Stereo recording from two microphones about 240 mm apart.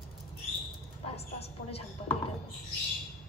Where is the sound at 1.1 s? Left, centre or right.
Left.